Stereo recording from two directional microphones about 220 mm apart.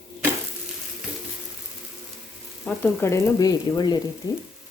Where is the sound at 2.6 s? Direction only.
10° left (ahead or behind).